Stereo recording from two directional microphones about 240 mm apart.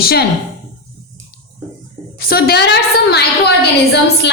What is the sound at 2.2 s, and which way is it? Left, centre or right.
A woman's voice, left.